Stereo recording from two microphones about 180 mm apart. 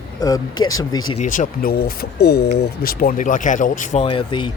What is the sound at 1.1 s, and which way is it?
Speech, 45° left (ahead or behind).